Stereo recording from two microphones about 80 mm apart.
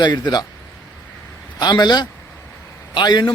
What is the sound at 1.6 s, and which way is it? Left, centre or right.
A man's voice, left.